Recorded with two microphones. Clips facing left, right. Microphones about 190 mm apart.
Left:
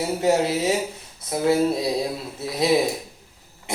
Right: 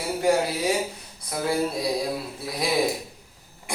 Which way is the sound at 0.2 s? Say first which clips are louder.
Left 1 dB; 25° left (ahead or behind).